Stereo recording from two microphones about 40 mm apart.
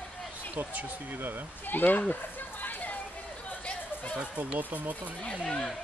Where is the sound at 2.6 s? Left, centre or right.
Left.